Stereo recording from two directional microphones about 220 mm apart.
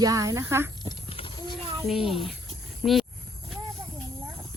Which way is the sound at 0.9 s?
25° left (ahead or behind).